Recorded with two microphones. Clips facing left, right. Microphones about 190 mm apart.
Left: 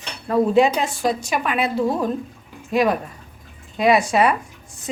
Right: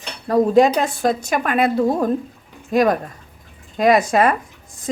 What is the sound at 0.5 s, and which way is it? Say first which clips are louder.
A woman's voice: right 3 dB; 45° right (ahead or behind).